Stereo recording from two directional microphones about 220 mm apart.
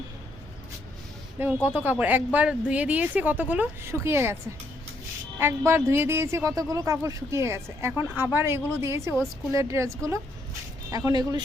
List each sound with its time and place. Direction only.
1.4 s speech: 10° right (ahead or behind)
5.4 s speech: 10° right (ahead or behind)